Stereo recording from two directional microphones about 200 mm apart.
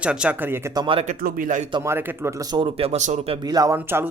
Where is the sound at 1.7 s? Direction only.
15° right (ahead or behind).